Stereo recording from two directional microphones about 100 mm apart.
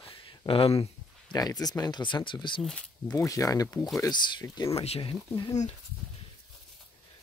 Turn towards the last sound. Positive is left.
turn(degrees=60)  # may be behind; listen again after turning